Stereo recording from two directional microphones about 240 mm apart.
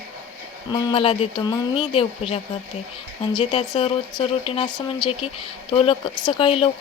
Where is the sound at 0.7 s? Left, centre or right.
Left.